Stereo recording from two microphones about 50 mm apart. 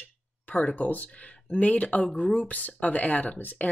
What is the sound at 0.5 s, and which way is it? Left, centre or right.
Speech, left.